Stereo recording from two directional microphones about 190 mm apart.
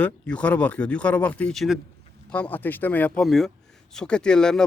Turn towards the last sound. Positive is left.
turn(degrees=5)  # may be behind; listen again after turning